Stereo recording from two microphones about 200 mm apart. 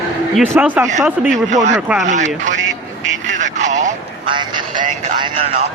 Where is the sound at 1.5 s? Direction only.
35° right (ahead or behind).